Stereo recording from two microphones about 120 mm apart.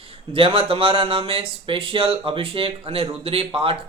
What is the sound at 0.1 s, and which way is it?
A man's voice, 50° right (ahead or behind).